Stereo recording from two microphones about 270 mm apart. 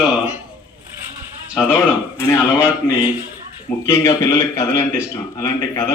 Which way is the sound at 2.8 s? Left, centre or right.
Centre.